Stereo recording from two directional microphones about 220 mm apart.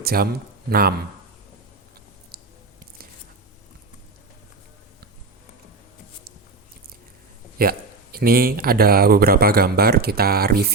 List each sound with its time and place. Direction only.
0.0 s speech: 45° right (ahead or behind)
7.6 s speech: 40° right (ahead or behind)